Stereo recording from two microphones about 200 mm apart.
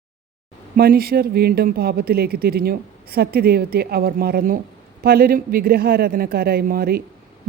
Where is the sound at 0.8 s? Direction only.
50° right (ahead or behind).